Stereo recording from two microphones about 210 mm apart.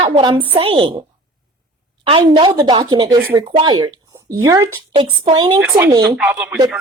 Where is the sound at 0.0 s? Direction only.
25° right (ahead or behind).